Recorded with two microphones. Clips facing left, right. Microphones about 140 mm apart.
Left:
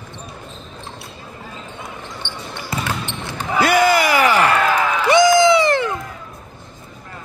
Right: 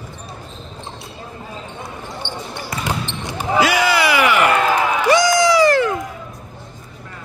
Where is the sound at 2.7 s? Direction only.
25° left (ahead or behind).